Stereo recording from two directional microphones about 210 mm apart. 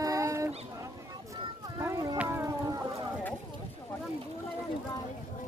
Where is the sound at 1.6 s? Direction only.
15° right (ahead or behind).